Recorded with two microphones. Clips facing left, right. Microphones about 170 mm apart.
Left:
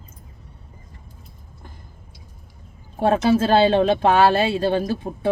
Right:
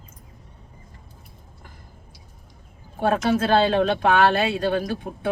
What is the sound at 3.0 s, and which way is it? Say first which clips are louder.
Speech: left 3 dB; 30° left (ahead or behind).